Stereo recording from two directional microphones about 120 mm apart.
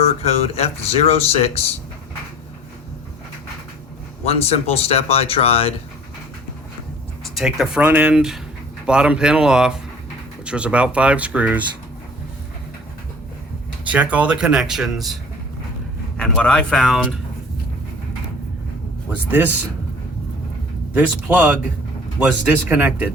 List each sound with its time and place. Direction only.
0.0 s speech: 60° left (ahead or behind)
4.3 s speech: 55° left (ahead or behind)
7.3 s speech: 5° right (ahead or behind)
13.8 s speech: 10° right (ahead or behind)
16.1 s speech: 5° left (ahead or behind)
19.1 s speech: 15° right (ahead or behind)
20.9 s speech: 15° right (ahead or behind)